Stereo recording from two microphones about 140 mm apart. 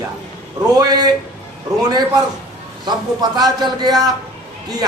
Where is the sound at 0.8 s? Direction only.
30° right (ahead or behind).